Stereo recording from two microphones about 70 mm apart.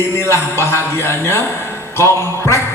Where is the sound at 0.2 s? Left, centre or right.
Left.